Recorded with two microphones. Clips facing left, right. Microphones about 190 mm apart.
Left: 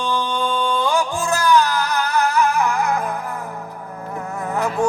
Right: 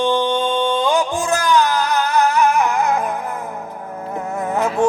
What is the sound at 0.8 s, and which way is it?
Music, 20° right (ahead or behind).